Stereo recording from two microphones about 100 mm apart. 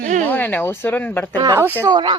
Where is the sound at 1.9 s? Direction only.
45° right (ahead or behind).